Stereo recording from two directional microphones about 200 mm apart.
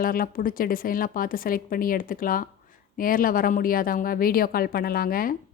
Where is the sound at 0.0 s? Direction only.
45° left (ahead or behind).